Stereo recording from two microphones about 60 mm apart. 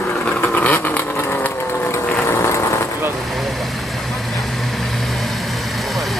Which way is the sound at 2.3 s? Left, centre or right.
Left.